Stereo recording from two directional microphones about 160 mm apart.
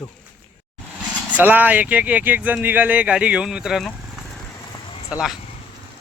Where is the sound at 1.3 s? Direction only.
10° right (ahead or behind).